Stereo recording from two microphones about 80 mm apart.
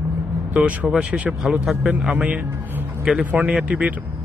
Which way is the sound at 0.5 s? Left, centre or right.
Centre.